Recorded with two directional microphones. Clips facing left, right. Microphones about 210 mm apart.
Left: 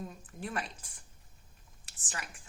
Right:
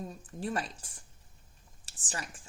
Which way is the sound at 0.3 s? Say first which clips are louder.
Right 4 dB; 30° right (ahead or behind).